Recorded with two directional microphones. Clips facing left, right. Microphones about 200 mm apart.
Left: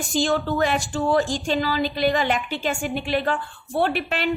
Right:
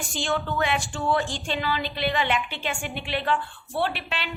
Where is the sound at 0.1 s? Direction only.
40° left (ahead or behind).